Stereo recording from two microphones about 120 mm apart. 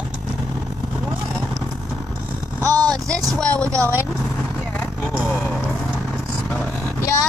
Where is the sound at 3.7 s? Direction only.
25° right (ahead or behind).